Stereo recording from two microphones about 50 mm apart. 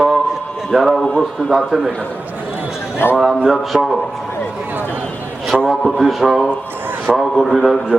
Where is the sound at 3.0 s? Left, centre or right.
Left.